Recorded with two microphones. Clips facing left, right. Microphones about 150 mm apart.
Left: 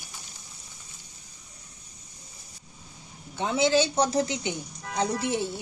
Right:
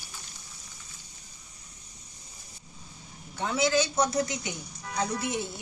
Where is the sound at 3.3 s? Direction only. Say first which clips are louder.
Left 3 dB; 25° left (ahead or behind).